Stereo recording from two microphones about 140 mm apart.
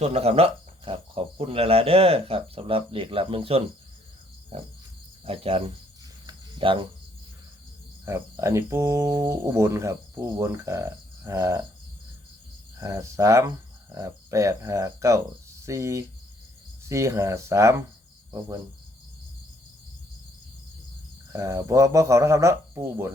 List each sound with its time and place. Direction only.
0.0 s speech: 45° right (ahead or behind)
5.2 s speech: 45° right (ahead or behind)
6.2 s cricket: 35° right (ahead or behind)
8.0 s cricket: 20° right (ahead or behind)
12.8 s cricket: 20° right (ahead or behind)
21.3 s cricket: 20° right (ahead or behind)